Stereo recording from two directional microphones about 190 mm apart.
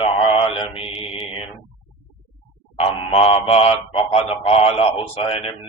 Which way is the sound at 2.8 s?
30° left (ahead or behind).